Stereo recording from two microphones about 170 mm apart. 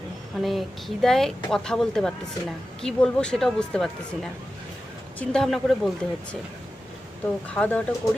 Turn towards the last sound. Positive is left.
turn(degrees=5)  # may be behind; listen again after turning